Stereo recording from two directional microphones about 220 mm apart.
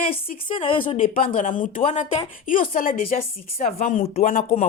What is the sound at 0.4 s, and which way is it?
Speech, 25° left (ahead or behind).